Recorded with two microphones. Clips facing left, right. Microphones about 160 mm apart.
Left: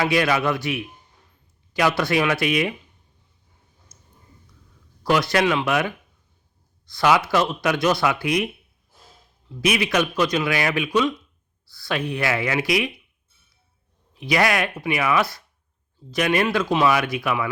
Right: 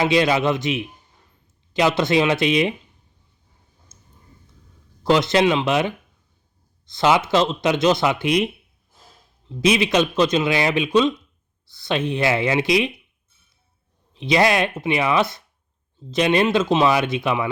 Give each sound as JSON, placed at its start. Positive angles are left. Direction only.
{"t": 0.0, "sound": "speech", "side_deg": -20}
{"t": 3.9, "sound": "a sound", "side_deg": -25}
{"t": 5.0, "sound": "speech", "side_deg": -25}
{"t": 9.5, "sound": "speech", "side_deg": -25}
{"t": 14.1, "sound": "speech", "side_deg": -25}